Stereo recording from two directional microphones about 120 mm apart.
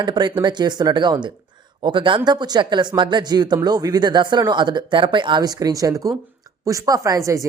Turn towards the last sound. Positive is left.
turn(degrees=-25)  # may be behind; listen again after turning